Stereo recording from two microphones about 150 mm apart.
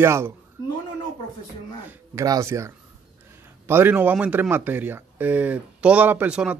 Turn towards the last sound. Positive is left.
turn(degrees=-10)  # may be behind; listen again after turning